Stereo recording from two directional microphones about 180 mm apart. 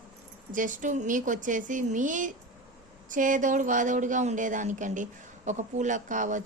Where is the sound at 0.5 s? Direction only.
45° right (ahead or behind).